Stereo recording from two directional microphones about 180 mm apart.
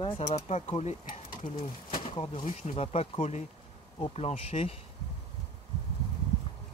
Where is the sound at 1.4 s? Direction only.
25° left (ahead or behind).